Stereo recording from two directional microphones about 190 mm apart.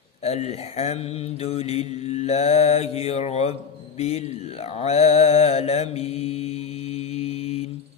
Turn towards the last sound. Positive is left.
turn(degrees=35)  # may be behind; listen again after turning